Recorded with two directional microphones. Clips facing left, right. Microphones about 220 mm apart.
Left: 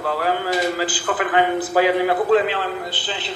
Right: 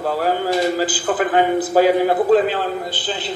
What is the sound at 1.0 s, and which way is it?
A man's voice, 40° right (ahead or behind).